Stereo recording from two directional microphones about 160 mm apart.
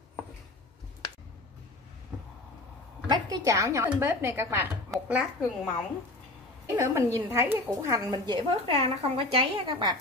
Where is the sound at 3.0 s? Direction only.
25° right (ahead or behind); by 5.3 s 5° right (ahead or behind).